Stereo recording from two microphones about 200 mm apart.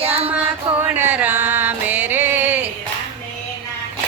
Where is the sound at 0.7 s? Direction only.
10° right (ahead or behind).